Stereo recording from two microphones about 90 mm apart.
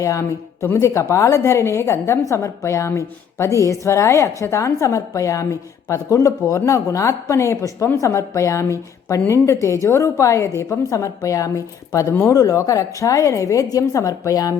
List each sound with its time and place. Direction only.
0.0 s a woman's voice: 35° left (ahead or behind)